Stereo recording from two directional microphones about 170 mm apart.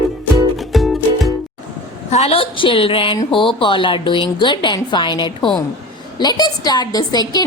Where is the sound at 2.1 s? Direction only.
35° left (ahead or behind).